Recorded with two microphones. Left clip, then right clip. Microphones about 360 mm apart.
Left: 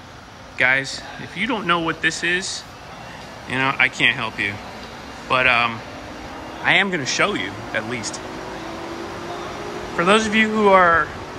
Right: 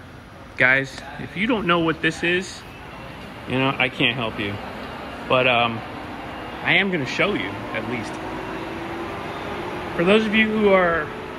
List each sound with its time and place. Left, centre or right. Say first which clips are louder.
0.6 s speech: even; centre
6.8 s speech: left 2 dB; centre
7.3 s speech: left 2 dB; left
9.9 s speech: left 2 dB; centre